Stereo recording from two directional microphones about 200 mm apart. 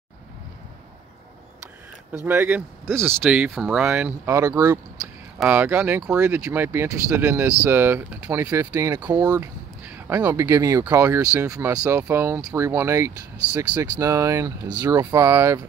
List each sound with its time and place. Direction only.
2.1 s speech: 10° right (ahead or behind)